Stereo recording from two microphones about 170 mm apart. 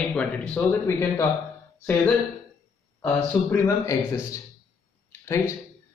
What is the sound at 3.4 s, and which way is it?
Speech, 20° left (ahead or behind).